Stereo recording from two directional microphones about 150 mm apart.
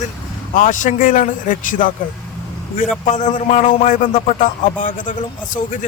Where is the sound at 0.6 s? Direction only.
60° left (ahead or behind).